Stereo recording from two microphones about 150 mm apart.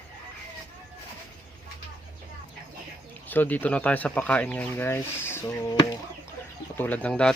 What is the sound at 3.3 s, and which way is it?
Speech, 10° left (ahead or behind).